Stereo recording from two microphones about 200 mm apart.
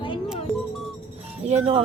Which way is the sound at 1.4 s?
30° right (ahead or behind).